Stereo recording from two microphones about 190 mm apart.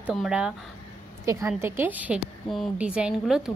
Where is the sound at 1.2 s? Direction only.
15° right (ahead or behind).